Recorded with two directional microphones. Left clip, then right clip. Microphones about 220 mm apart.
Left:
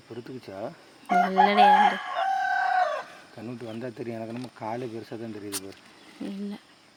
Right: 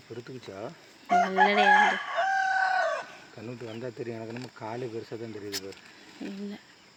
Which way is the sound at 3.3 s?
20° left (ahead or behind).